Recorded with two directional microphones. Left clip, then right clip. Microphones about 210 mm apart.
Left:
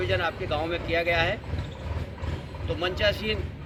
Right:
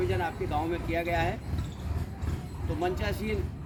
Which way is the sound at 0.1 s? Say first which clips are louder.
Left 4 dB; 20° right (ahead or behind).